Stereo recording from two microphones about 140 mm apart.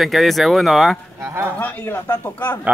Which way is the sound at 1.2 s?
20° right (ahead or behind).